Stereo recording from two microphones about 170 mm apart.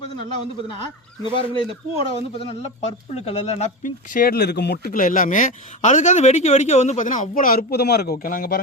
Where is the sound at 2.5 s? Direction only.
40° left (ahead or behind); by 8.6 s 60° left (ahead or behind).